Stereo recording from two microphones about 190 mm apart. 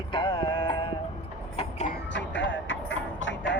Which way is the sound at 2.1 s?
75° left (ahead or behind).